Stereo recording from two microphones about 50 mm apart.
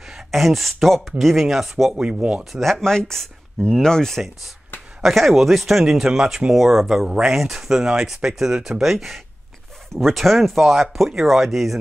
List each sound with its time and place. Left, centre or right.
0.1 s speech: centre
1.9 s speech: centre
2.5 s speech: centre
5.0 s speech: centre